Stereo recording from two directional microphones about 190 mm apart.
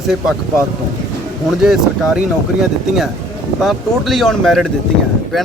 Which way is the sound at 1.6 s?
5° right (ahead or behind).